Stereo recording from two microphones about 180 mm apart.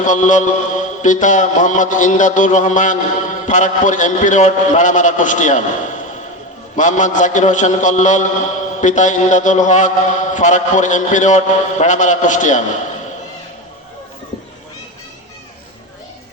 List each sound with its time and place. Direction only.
0.0 s a man's voice: 45° left (ahead or behind)
6.7 s a man's voice: 45° left (ahead or behind)